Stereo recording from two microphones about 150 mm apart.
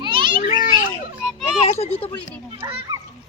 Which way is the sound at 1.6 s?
40° left (ahead or behind).